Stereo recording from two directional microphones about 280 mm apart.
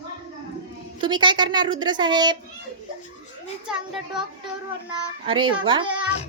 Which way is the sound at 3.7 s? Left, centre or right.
Centre.